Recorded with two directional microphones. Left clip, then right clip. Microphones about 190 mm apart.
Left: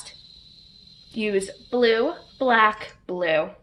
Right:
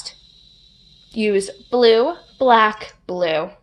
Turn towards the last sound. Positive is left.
turn(degrees=-45)  # may be behind; listen again after turning